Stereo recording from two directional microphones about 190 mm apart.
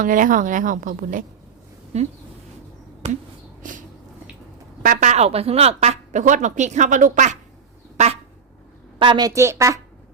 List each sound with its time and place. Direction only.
0.0 s a woman's voice: 45° right (ahead or behind)
1.9 s a woman's voice: 35° right (ahead or behind)
3.0 s finger snapping: 35° right (ahead or behind)
3.6 s a sound: 45° right (ahead or behind)
4.8 s a woman's voice: 40° right (ahead or behind)
7.9 s a sound: 35° right (ahead or behind)
9.0 s a woman's voice: 25° right (ahead or behind)